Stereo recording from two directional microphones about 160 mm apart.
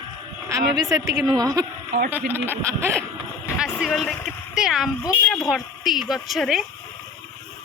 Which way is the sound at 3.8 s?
Centre (ahead or behind).